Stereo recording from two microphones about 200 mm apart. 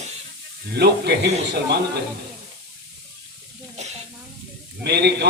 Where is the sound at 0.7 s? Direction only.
55° right (ahead or behind).